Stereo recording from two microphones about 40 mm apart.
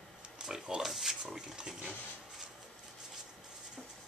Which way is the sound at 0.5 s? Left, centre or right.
Centre.